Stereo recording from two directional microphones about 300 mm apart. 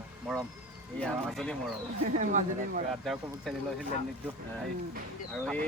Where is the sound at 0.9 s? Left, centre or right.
Centre.